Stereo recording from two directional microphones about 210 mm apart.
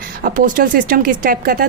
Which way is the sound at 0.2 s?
40° right (ahead or behind).